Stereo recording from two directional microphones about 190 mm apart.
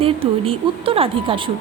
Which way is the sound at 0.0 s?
30° right (ahead or behind).